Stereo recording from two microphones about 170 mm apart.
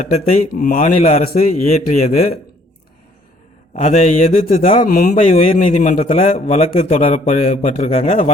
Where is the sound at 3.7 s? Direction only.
40° left (ahead or behind).